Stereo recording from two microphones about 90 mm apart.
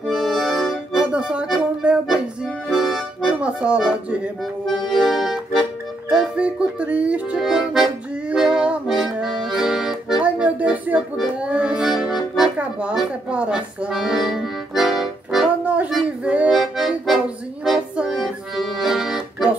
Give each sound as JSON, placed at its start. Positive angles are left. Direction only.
{"t": 0.0, "sound": "accordion", "side_deg": 0}
{"t": 1.0, "sound": "music", "side_deg": -10}
{"t": 2.0, "sound": "accordion", "side_deg": 0}
{"t": 3.3, "sound": "speech", "side_deg": -15}
{"t": 4.6, "sound": "accordion", "side_deg": 0}
{"t": 10.2, "sound": "music", "side_deg": -15}
{"t": 12.9, "sound": "accordion", "side_deg": -10}
{"t": 15.6, "sound": "music", "side_deg": -15}
{"t": 16.5, "sound": "accordion", "side_deg": -5}